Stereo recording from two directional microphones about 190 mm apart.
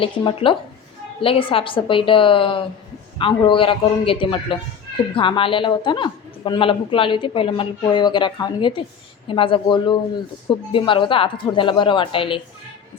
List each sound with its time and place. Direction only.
0.0 s a man's voice: 30° left (ahead or behind)